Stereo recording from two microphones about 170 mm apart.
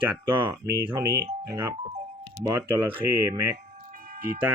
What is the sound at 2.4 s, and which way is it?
Speech, 15° right (ahead or behind).